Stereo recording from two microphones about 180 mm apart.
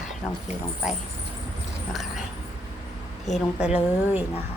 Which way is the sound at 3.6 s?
10° right (ahead or behind).